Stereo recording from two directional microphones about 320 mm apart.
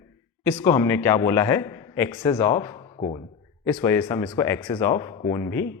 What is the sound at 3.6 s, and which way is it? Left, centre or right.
A man's voice, centre.